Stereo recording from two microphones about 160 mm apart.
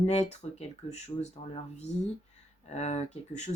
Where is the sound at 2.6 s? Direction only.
45° left (ahead or behind).